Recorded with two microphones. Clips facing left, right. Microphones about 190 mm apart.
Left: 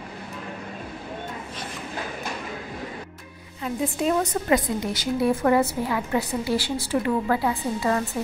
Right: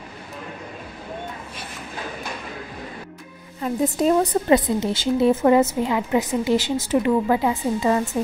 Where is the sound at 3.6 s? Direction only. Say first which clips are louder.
Right 5 dB; 40° right (ahead or behind); by 8.0 s 20° right (ahead or behind).